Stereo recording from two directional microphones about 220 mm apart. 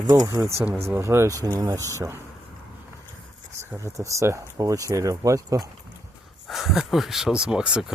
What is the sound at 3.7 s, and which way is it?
Speech, 15° right (ahead or behind).